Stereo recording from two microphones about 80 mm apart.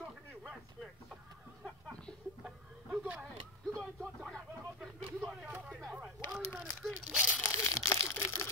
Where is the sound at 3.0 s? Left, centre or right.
Centre.